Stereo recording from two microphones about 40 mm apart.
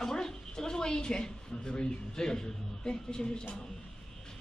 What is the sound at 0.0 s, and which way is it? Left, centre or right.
Speech, centre.